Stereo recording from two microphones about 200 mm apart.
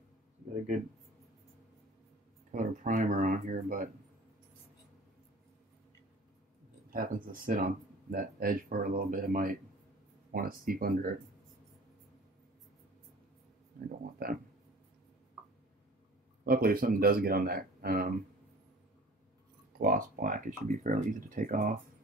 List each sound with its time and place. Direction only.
2.5 s speech: 40° right (ahead or behind)
6.9 s speech: 45° right (ahead or behind)
16.4 s speech: 45° right (ahead or behind)
19.8 s speech: 45° right (ahead or behind)